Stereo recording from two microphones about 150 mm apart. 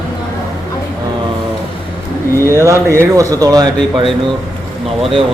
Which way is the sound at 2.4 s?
20° right (ahead or behind).